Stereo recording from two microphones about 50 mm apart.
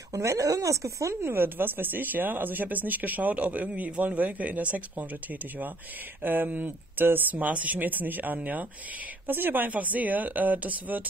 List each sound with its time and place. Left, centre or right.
0.1 s speech: right
1.2 s speech: right
7.3 s speech: right
9.3 s speech: right
9.7 s speech: right